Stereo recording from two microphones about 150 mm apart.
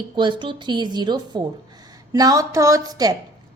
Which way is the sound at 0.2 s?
35° right (ahead or behind).